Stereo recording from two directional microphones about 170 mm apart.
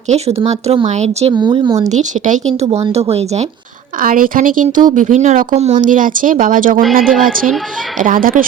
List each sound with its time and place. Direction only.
0.1 s speech: 40° right (ahead or behind)
1.3 s speech: 25° right (ahead or behind)
1.9 s speech: 45° right (ahead or behind)
4.0 s speech: 55° right (ahead or behind)